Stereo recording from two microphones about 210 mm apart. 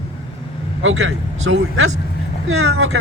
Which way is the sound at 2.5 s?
80° right.